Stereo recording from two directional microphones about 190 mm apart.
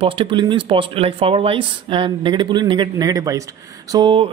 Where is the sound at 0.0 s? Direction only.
30° right (ahead or behind).